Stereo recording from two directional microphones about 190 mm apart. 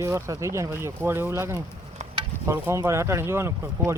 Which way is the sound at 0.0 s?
15° right (ahead or behind).